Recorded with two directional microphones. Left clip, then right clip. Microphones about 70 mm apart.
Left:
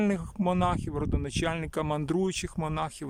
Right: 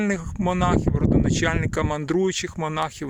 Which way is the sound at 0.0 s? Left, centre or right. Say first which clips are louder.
Right 4 dB; centre.